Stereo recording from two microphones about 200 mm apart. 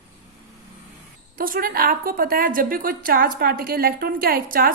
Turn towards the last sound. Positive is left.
turn(degrees=-45)  # may be behind; listen again after turning